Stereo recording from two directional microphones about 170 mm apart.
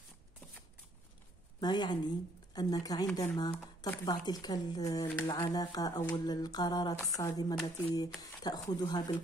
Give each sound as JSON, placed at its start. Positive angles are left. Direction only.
{"t": 1.6, "sound": "speech", "side_deg": 25}